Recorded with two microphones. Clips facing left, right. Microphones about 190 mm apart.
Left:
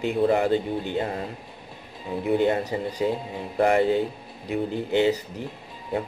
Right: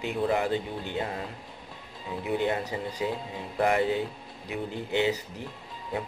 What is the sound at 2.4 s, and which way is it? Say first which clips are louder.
Speech: left 5 dB; 40° left (ahead or behind).